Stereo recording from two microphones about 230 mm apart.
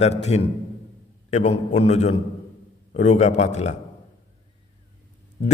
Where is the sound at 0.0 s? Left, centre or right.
Left.